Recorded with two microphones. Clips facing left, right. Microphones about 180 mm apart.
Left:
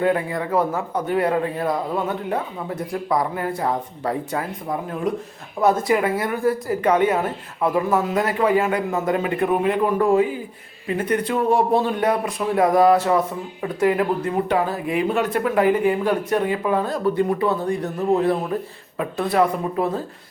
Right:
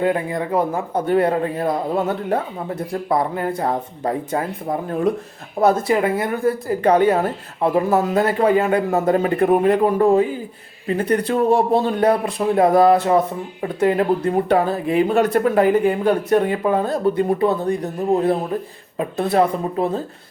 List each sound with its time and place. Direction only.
0.0 s speech: 25° right (ahead or behind); by 2.4 s 40° right (ahead or behind)
3.1 s speech: 30° right (ahead or behind)
5.5 s speech: 35° right (ahead or behind)
15.1 s speech: 45° right (ahead or behind)
16.9 s speech: 30° right (ahead or behind)